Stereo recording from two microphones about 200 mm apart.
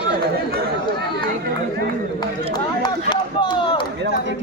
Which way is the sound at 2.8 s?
20° left (ahead or behind).